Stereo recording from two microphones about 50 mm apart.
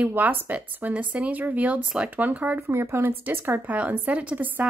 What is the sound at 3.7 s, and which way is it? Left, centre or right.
Speech, right.